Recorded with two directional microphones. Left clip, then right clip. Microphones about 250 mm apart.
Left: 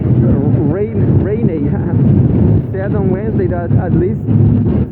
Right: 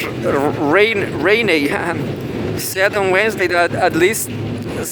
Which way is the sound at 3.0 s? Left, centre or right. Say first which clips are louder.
Right 3 dB; right.